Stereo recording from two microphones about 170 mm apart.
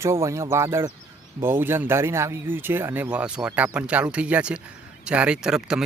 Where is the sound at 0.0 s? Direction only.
15° right (ahead or behind).